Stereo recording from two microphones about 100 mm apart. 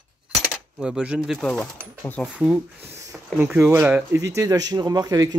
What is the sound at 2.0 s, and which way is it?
Speech, 20° left (ahead or behind).